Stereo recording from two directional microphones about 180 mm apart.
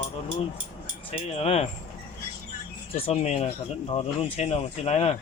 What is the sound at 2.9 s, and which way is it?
Speech, 35° left (ahead or behind).